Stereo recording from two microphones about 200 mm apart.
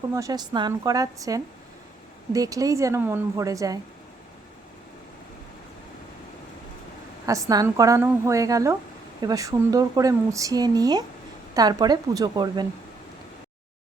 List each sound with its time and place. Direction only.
0.1 s speech: 15° right (ahead or behind)
7.3 s a woman's voice: 15° right (ahead or behind)